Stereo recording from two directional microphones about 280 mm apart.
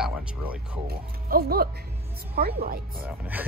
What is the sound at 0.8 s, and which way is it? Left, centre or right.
Speech, right.